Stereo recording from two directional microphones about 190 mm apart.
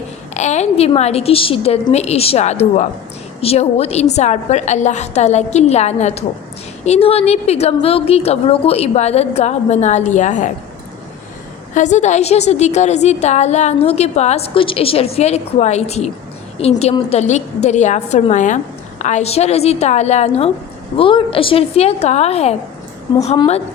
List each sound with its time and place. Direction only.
0.3 s a woman's voice: 35° left (ahead or behind)
11.7 s a woman's voice: 40° left (ahead or behind)